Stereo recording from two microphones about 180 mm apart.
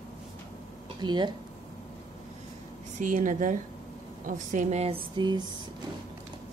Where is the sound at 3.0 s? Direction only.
45° right (ahead or behind); by 5.5 s 25° right (ahead or behind).